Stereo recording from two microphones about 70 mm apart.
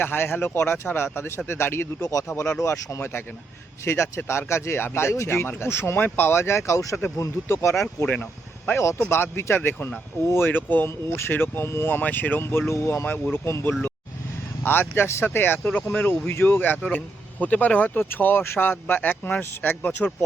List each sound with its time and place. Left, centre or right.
0.0 s speech: left
2.0 s speech: left
3.0 s speech: left
3.8 s speech: left
8.0 s speech: centre
9.0 s speech: left